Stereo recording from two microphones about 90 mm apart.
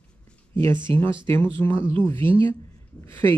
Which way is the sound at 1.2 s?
25° left (ahead or behind).